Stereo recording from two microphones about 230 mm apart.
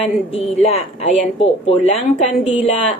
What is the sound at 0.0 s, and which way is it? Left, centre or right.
A woman's voice, left.